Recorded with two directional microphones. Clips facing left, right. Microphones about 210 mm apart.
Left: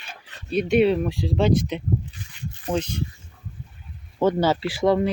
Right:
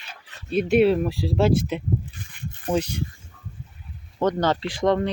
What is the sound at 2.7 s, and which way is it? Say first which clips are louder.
Speech: right 2 dB; 10° right (ahead or behind).